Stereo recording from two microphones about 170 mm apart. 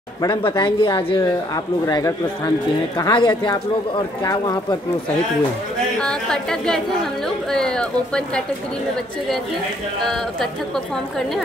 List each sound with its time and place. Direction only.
0.2 s speech: 25° left (ahead or behind)
5.9 s a woman's voice: 5° left (ahead or behind)